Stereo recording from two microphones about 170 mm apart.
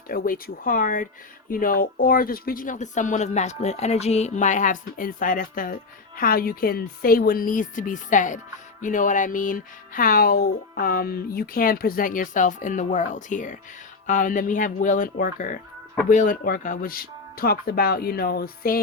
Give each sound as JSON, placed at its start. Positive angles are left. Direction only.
{"t": 0.1, "sound": "speech", "side_deg": 55}